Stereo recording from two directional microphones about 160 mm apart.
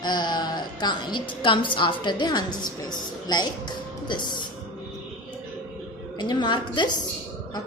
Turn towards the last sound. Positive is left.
turn(degrees=30)  # may be behind; listen again after turning